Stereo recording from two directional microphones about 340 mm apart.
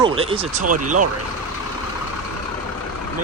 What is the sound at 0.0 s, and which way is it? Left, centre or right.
Speech, centre.